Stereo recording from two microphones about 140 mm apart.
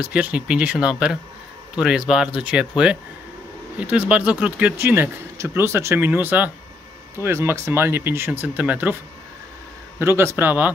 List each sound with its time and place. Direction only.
0.0 s speech: 10° right (ahead or behind)
3.8 s speech: 10° right (ahead or behind)
9.9 s speech: 15° right (ahead or behind)